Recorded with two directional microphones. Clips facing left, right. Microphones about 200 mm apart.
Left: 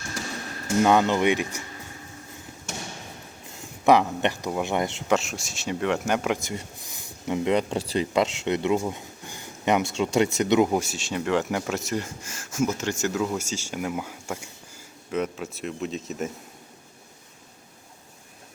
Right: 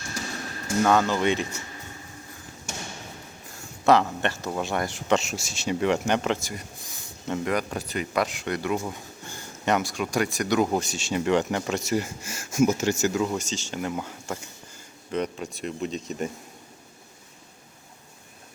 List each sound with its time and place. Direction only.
0.8 s speech: 15° left (ahead or behind)
3.8 s speech: 15° left (ahead or behind)
5.0 s speech: centre (ahead or behind)
6.4 s speech: 25° left (ahead or behind)
10.7 s speech: 5° left (ahead or behind)